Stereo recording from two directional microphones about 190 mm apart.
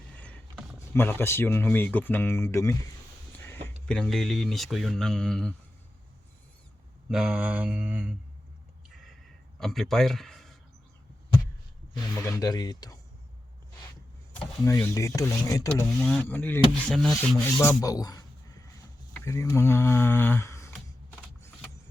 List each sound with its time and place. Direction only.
0.2 s speech: 5° left (ahead or behind)
3.3 s a sound: 10° left (ahead or behind)
3.8 s speech: 5° left (ahead or behind)
7.1 s mantra: 5° right (ahead or behind)
9.6 s speech: centre (ahead or behind)
11.9 s speech: 15° left (ahead or behind)
14.6 s speech: 15° left (ahead or behind)
17.6 s speech: 15° left (ahead or behind)
19.1 s a sound: 15° left (ahead or behind)